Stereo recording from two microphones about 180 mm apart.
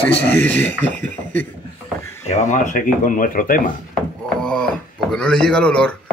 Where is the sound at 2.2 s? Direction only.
40° left (ahead or behind).